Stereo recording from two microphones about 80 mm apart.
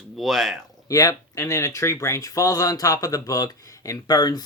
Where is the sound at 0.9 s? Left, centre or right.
Left.